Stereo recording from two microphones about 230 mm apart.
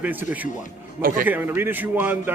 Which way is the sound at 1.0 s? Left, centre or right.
Right.